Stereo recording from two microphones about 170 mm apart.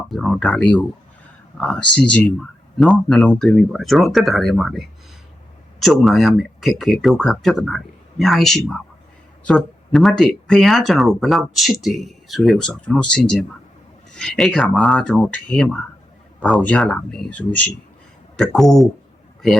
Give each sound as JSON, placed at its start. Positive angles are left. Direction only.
{"t": 0.1, "sound": "speech", "side_deg": 5}